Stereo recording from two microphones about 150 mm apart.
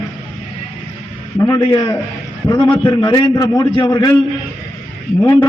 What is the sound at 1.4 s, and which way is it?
A man's voice, 25° left (ahead or behind).